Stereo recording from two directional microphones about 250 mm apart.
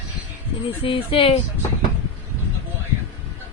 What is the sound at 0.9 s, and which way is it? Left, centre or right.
Speech, left.